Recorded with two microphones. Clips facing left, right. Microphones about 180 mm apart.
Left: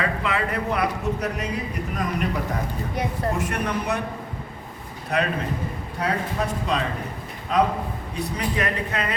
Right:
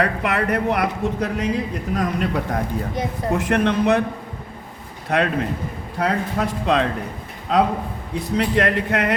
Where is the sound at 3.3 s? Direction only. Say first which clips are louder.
Right 7 dB; 85° right.